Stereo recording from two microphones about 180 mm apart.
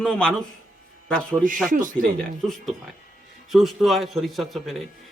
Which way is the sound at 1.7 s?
45° right (ahead or behind).